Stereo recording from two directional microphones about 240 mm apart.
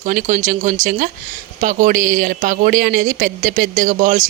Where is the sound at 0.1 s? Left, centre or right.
Right.